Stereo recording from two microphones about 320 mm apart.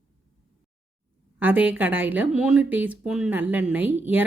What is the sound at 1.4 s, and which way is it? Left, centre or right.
Speech, centre.